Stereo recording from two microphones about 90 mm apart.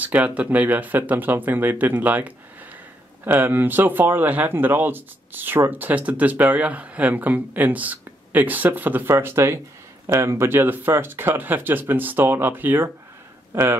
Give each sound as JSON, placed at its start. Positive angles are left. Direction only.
{"t": 0.0, "sound": "speech", "side_deg": -15}